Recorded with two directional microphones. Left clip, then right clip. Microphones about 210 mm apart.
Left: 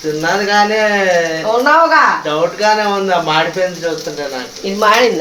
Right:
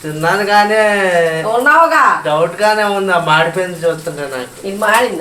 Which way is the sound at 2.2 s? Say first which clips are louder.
Right 1 dB; 15° right (ahead or behind).